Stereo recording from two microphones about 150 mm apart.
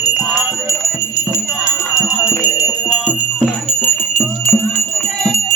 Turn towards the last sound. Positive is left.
turn(degrees=5)  # may be behind; listen again after turning